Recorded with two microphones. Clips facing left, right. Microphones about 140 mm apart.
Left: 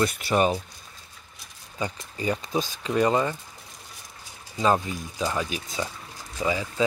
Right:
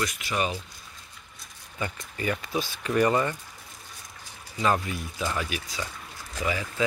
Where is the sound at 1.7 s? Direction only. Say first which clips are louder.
Left 2 dB; 20° left (ahead or behind).